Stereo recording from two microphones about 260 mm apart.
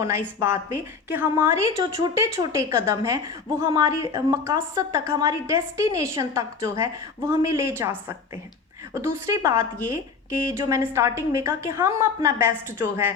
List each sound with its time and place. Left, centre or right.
0.3 s a woman's voice: centre
9.0 s a woman's voice: centre